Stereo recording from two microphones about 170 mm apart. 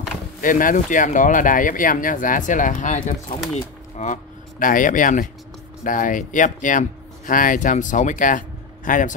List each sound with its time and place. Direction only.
0.4 s speech: 55° left (ahead or behind)